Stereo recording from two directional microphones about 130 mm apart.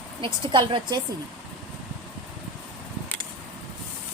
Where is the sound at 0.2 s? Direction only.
40° right (ahead or behind).